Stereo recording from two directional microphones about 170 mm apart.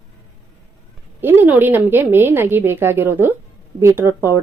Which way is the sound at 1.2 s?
10° right (ahead or behind).